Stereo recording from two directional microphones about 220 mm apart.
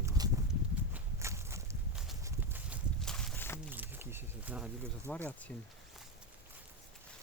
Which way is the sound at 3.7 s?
10° right (ahead or behind).